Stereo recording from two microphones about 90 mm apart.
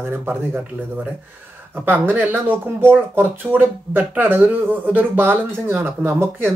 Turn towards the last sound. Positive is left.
turn(degrees=-25)  # may be behind; listen again after turning